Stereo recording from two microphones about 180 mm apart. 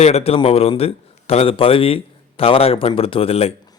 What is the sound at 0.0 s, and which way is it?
A man's voice, 35° left (ahead or behind).